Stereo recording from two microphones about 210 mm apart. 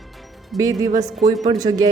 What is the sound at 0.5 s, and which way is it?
Speech, 15° right (ahead or behind).